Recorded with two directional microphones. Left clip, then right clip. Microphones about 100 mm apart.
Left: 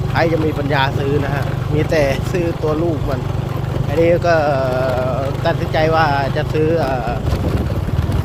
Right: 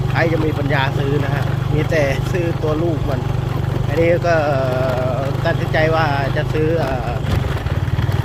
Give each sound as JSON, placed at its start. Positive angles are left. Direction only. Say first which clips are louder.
{"t": 0.2, "sound": "speech", "louder": "left 2 dB", "side_deg": 40}
{"t": 1.9, "sound": "speech", "louder": "left 2 dB", "side_deg": 45}
{"t": 3.9, "sound": "speech", "louder": "left 2 dB", "side_deg": 40}